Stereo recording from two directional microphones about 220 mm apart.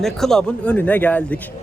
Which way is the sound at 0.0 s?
Centre (ahead or behind).